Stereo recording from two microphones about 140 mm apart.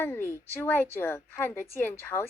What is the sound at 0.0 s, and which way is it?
A woman's voice, 15° left (ahead or behind).